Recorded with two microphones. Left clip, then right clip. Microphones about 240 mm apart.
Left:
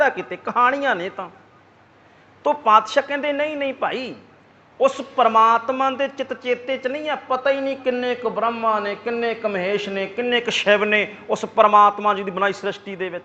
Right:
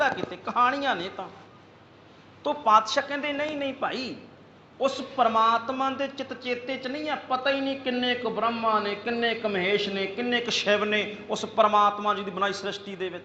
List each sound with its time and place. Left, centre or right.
0.0 s speech: left
2.4 s speech: left